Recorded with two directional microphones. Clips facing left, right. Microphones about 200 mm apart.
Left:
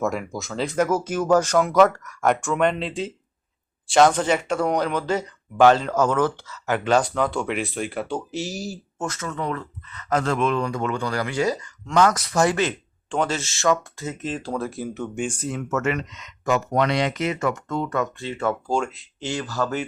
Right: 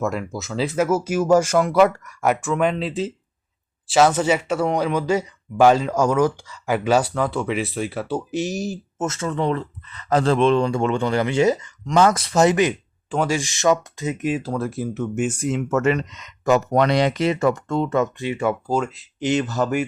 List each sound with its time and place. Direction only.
0.0 s speech: centre (ahead or behind)
8.3 s speech: 20° right (ahead or behind)
15.7 s speech: 30° right (ahead or behind); by 19.0 s centre (ahead or behind)
19.2 s speech: 20° right (ahead or behind)